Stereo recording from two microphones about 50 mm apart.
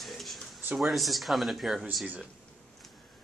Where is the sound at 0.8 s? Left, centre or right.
Centre.